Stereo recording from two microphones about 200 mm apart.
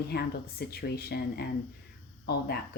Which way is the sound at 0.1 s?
55° left (ahead or behind).